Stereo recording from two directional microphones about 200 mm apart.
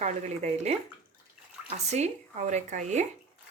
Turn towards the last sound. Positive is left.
turn(degrees=-35)  # may be behind; listen again after turning